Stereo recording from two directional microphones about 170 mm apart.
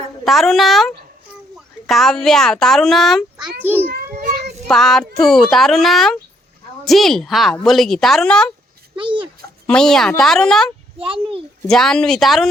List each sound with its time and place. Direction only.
0.3 s a woman's voice: centre (ahead or behind)
4.2 s child singing: 50° right (ahead or behind)
4.7 s a woman's voice: centre (ahead or behind)
9.0 s a child's voice: 30° right (ahead or behind)
9.6 s a woman's voice: 5° left (ahead or behind)
11.0 s a child's voice: 30° right (ahead or behind)
11.7 s a woman's voice: 5° left (ahead or behind)